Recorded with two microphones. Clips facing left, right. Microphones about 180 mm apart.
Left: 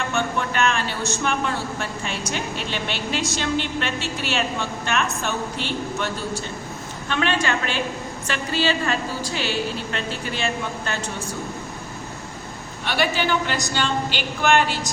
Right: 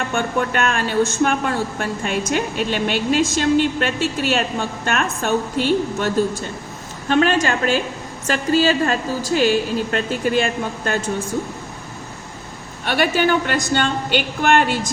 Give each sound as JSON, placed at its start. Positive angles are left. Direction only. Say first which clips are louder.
{"t": 0.1, "sound": "a woman's voice", "louder": "right 4 dB", "side_deg": -50}
{"t": 7.1, "sound": "a woman's voice", "louder": "right 6 dB", "side_deg": -40}
{"t": 12.8, "sound": "a woman's voice", "louder": "right 5 dB", "side_deg": -50}